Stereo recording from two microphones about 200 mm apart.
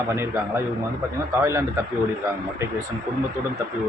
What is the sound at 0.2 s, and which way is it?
Speech, 10° right (ahead or behind).